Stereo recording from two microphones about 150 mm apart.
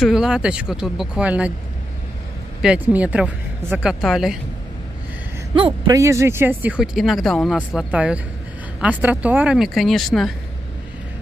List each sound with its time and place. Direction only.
0.0 s speech: 5° right (ahead or behind)
2.6 s speech: 10° right (ahead or behind)
5.5 s speech: 30° right (ahead or behind)
5.9 s speech: 20° right (ahead or behind); by 10.3 s centre (ahead or behind)